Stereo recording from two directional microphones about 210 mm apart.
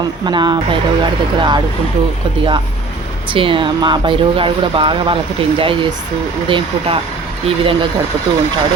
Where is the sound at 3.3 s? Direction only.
25° right (ahead or behind).